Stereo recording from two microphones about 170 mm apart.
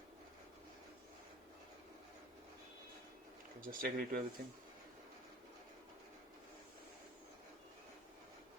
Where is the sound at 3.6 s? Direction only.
55° right (ahead or behind).